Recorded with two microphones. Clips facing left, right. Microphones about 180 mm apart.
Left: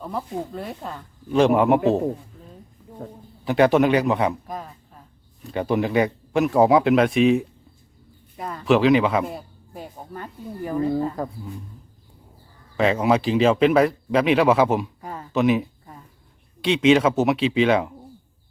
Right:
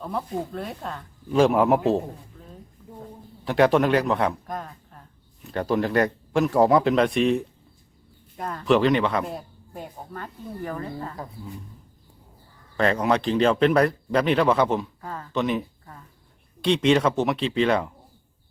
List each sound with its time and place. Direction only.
0.0 s speech: centre (ahead or behind)
3.4 s a man's voice: centre (ahead or behind)
10.1 s speech: 15° left (ahead or behind)
12.7 s speech: 5° left (ahead or behind)
15.0 s a sound: 15° left (ahead or behind)
15.3 s speech: 5° left (ahead or behind)